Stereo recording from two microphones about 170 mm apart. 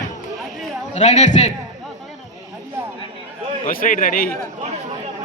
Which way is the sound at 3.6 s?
55° left (ahead or behind).